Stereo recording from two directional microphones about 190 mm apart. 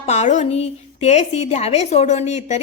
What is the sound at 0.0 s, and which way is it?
A woman's voice, 35° left (ahead or behind).